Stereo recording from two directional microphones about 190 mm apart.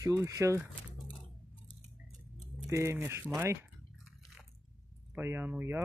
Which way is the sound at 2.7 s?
15° right (ahead or behind).